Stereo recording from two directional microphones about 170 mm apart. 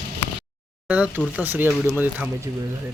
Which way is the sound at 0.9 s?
5° right (ahead or behind).